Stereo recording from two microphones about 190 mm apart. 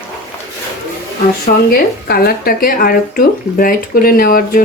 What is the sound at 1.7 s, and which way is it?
Speech, 50° left (ahead or behind).